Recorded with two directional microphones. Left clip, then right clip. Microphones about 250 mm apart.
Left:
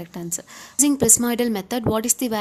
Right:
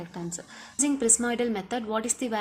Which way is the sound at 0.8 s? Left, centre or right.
Left.